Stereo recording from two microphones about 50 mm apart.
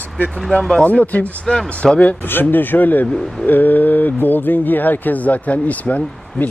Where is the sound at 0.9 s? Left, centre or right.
Left.